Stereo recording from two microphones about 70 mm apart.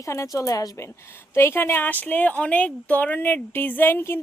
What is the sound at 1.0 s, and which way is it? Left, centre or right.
Speech, left.